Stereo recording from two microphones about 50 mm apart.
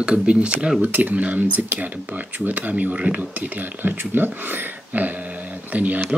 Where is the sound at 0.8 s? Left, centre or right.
Right.